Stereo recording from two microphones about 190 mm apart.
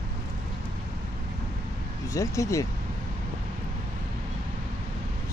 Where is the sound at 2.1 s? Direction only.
15° left (ahead or behind).